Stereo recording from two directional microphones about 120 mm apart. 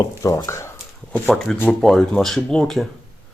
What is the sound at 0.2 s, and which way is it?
Speech, 25° left (ahead or behind).